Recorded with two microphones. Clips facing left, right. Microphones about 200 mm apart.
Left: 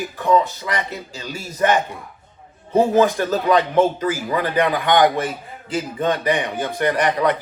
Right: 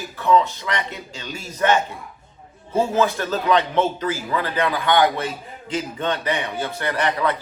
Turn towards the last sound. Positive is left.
turn(degrees=15)  # may be behind; listen again after turning